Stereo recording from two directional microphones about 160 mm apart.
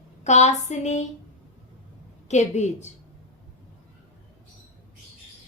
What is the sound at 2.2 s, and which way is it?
Speech, 45° left (ahead or behind).